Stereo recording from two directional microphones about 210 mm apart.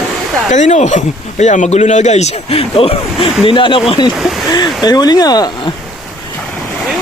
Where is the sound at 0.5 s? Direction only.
35° left (ahead or behind).